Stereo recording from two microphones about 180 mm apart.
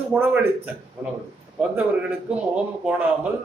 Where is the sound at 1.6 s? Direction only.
10° right (ahead or behind).